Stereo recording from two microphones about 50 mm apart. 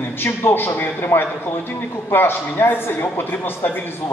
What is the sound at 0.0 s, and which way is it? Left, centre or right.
A man's voice, left.